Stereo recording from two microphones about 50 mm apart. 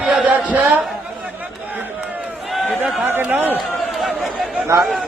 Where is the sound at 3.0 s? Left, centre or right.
Right.